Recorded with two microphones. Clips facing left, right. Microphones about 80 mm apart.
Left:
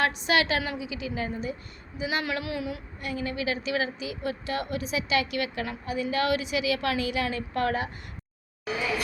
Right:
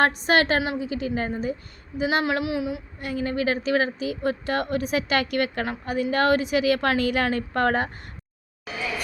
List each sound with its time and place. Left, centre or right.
0.0 s a woman's voice: right
2.2 s speech: right
3.0 s a woman's voice: right